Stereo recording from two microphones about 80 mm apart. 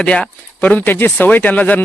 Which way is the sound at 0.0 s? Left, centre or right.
Centre.